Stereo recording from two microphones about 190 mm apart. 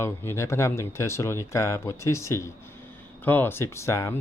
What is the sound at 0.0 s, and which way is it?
Speech, 15° left (ahead or behind).